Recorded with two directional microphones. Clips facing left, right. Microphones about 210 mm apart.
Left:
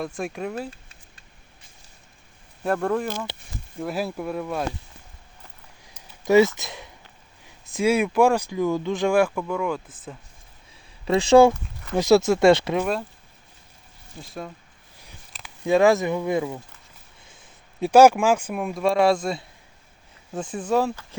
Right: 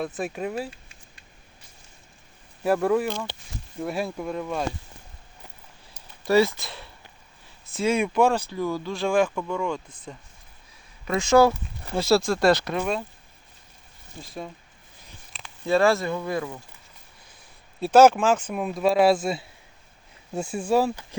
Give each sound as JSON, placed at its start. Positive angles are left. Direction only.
{"t": 0.0, "sound": "speech", "side_deg": -5}
{"t": 2.6, "sound": "speech", "side_deg": -5}
{"t": 3.1, "sound": "speech", "side_deg": 5}
{"t": 6.2, "sound": "speech", "side_deg": 20}
{"t": 6.6, "sound": "a sound", "side_deg": 15}
{"t": 7.7, "sound": "speech", "side_deg": 10}
{"t": 11.0, "sound": "speech", "side_deg": 30}
{"t": 11.9, "sound": "speech", "side_deg": 20}
{"t": 12.8, "sound": "speech", "side_deg": 0}
{"t": 14.2, "sound": "speech", "side_deg": 0}
{"t": 15.3, "sound": "a sound", "side_deg": 0}
{"t": 15.6, "sound": "speech", "side_deg": 15}